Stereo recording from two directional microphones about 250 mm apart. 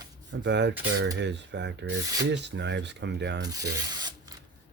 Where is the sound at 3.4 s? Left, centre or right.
Centre.